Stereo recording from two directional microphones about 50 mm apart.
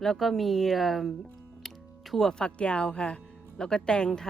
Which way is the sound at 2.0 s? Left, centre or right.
Centre.